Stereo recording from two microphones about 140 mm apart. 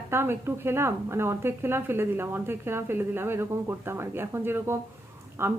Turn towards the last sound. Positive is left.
turn(degrees=-20)  # may be behind; listen again after turning